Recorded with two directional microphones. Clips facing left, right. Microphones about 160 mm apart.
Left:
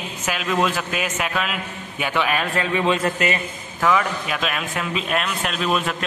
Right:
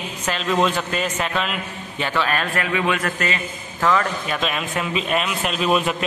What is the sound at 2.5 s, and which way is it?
Speech, 25° left (ahead or behind).